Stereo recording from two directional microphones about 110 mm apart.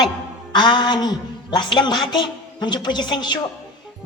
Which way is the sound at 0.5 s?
45° left (ahead or behind).